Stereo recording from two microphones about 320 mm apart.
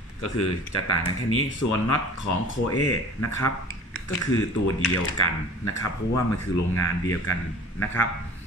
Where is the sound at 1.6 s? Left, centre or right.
Left.